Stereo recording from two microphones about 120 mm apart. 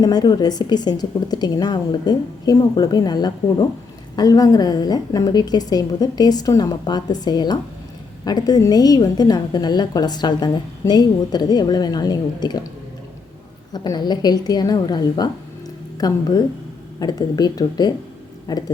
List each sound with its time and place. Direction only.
0.0 s a woman's voice: 35° left (ahead or behind)
13.7 s a woman's voice: 35° left (ahead or behind)